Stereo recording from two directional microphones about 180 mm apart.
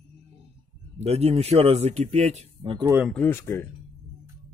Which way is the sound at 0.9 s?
35° right (ahead or behind).